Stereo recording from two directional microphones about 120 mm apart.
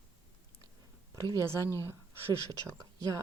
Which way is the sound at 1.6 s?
25° left (ahead or behind).